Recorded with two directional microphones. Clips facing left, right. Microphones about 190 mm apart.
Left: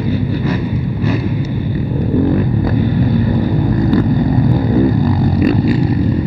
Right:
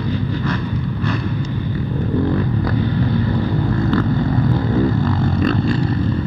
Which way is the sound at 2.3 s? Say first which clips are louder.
Left 4 dB; 10° left (ahead or behind).